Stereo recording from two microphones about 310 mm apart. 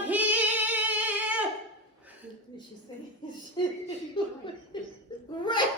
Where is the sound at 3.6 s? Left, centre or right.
Centre.